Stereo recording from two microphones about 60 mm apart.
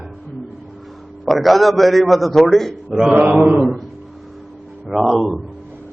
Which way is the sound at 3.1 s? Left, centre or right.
Right.